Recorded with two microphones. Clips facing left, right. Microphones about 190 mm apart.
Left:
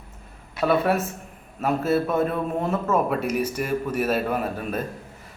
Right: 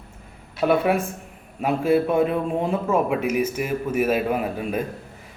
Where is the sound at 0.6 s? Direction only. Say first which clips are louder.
Right 1 dB; 10° right (ahead or behind).